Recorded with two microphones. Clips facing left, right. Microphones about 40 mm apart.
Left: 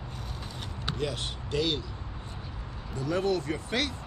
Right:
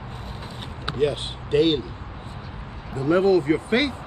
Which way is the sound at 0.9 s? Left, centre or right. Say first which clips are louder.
Right 10 dB; right.